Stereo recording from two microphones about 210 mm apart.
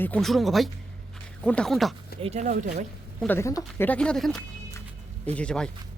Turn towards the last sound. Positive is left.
turn(degrees=5)  # may be behind; listen again after turning